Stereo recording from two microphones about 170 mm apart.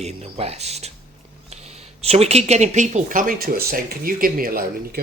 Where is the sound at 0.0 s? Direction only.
35° right (ahead or behind).